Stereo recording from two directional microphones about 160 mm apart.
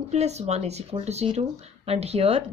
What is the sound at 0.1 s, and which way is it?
Speech, 45° right (ahead or behind).